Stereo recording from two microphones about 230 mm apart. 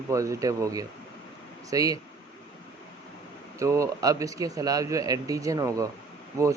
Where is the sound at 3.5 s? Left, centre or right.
Centre.